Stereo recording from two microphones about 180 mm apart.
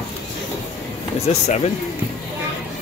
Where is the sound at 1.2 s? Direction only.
35° left (ahead or behind).